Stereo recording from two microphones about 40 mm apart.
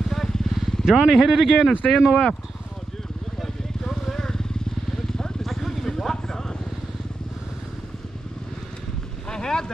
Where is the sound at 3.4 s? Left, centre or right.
Centre.